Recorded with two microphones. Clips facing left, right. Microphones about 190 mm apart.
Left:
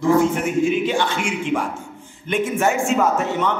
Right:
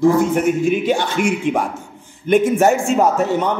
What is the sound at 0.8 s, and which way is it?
A man's voice, 40° right (ahead or behind).